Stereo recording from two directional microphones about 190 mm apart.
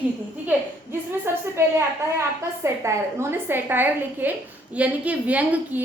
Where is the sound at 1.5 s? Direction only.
15° right (ahead or behind).